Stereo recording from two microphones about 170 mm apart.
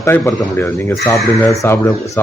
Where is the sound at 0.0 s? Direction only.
20° left (ahead or behind).